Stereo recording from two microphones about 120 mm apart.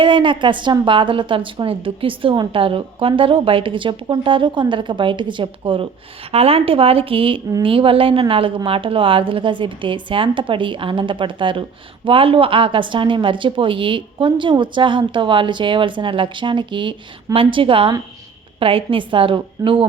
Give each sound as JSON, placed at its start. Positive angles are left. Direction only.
{"t": 0.0, "sound": "a woman's voice", "side_deg": -45}